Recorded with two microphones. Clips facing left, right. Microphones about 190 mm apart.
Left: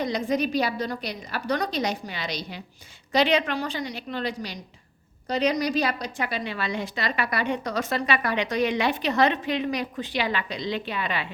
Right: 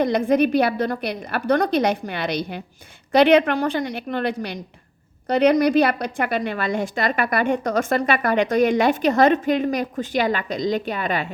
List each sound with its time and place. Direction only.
0.0 s a woman's voice: 55° right (ahead or behind)